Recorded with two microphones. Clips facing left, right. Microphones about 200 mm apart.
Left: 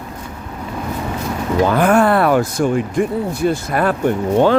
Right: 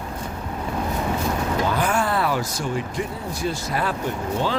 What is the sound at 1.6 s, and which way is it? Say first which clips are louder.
Speech: left 12 dB; 55° left (ahead or behind).